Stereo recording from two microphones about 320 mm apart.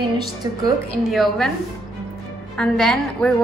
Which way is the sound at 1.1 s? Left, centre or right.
Centre.